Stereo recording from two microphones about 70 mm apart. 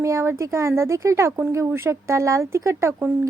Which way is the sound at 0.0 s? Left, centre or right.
Right.